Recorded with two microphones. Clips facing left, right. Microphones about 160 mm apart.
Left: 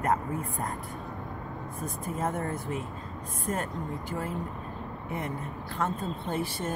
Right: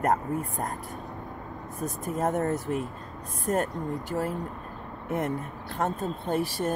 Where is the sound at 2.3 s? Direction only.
40° right (ahead or behind).